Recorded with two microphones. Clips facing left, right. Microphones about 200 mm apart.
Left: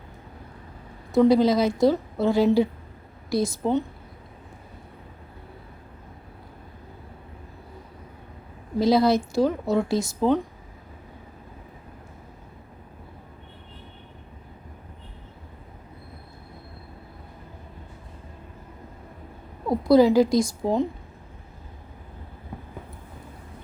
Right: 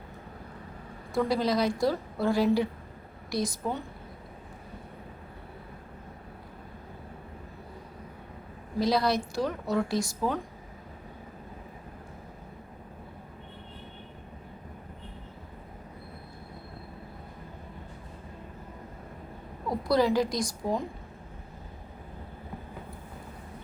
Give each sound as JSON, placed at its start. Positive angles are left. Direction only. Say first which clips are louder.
{"t": 1.1, "sound": "a woman's voice", "louder": "left 9 dB", "side_deg": 20}
{"t": 8.8, "sound": "a woman's voice", "louder": "left 7 dB", "side_deg": 25}
{"t": 19.6, "sound": "a woman's voice", "louder": "left 8 dB", "side_deg": 25}